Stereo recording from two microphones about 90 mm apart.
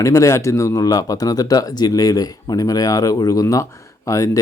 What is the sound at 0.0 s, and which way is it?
A man's voice, 35° left (ahead or behind).